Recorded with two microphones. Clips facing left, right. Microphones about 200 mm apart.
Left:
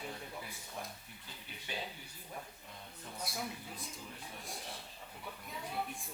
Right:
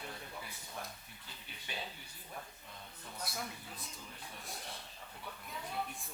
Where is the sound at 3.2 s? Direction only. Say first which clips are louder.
Left 2 dB; 5° left (ahead or behind).